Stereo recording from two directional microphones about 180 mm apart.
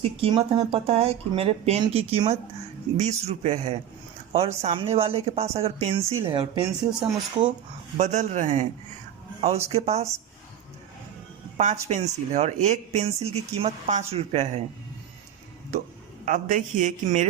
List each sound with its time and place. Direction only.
0.0 s speech: 30° right (ahead or behind)
7.9 s speech: 40° right (ahead or behind)
9.7 s speech: 35° right (ahead or behind)
11.5 s speech: 40° right (ahead or behind)
16.2 s speech: 45° right (ahead or behind)